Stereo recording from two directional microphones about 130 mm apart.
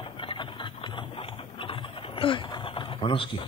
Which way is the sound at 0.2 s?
40° left (ahead or behind).